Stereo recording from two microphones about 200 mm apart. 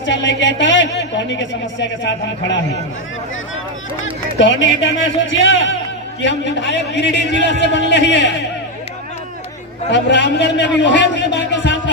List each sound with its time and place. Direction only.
0.0 s speech: 65° left (ahead or behind)
4.4 s a man's voice: 65° left (ahead or behind)
9.9 s speech: 60° left (ahead or behind)